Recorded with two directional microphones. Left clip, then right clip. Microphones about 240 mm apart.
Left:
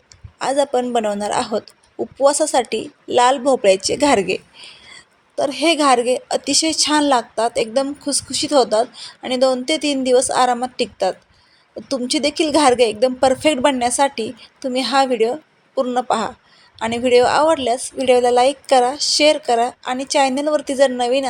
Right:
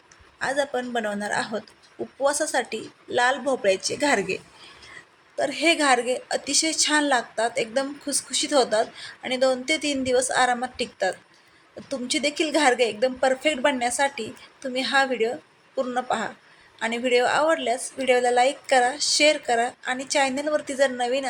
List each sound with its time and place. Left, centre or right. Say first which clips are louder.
0.3 s a woman's voice: left 8 dB; left
5.4 s a woman's voice: left 5 dB; centre